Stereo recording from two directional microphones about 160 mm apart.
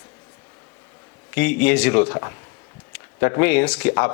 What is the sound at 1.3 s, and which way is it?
Speech, 10° left (ahead or behind).